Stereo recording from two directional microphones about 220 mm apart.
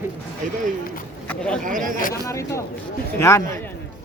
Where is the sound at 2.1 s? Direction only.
15° left (ahead or behind).